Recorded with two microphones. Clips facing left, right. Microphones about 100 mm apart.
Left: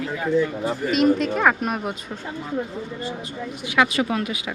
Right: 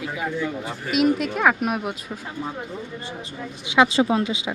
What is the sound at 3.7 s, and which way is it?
Speech, 25° right (ahead or behind).